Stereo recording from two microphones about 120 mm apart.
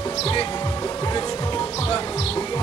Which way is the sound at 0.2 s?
50° left (ahead or behind).